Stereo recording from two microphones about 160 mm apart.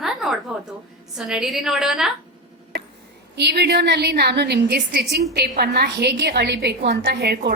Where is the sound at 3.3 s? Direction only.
90° right.